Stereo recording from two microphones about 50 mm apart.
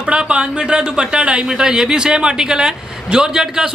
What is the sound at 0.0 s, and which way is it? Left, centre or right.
Speech, right.